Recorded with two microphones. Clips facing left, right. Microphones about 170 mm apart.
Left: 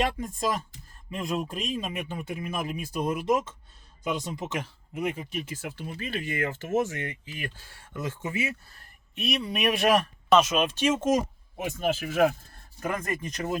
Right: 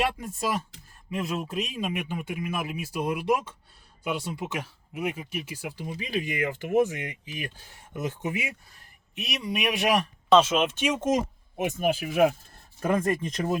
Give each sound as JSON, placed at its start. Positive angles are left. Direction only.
{"t": 0.2, "sound": "speech", "side_deg": -10}
{"t": 10.3, "sound": "speech", "side_deg": -25}
{"t": 12.8, "sound": "speech", "side_deg": -30}